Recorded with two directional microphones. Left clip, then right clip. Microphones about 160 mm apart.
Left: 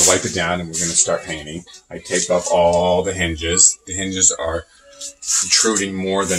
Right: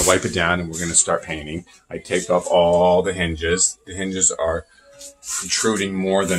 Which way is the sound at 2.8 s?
15° right (ahead or behind).